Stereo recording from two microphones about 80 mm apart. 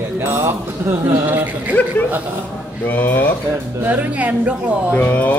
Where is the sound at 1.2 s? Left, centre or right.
Centre.